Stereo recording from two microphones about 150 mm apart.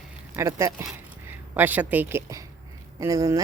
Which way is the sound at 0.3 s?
20° right (ahead or behind).